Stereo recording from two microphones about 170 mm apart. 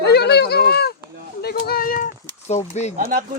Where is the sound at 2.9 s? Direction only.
55° right (ahead or behind).